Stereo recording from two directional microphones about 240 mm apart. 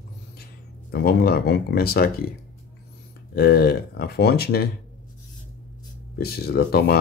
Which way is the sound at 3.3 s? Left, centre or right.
Left.